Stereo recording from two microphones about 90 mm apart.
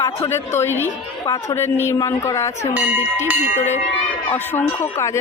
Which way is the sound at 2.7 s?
15° right (ahead or behind).